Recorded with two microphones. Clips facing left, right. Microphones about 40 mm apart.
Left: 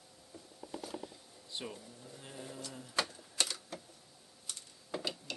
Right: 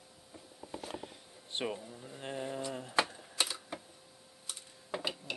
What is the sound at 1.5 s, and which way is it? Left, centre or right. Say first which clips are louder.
Speech: right 7 dB; right.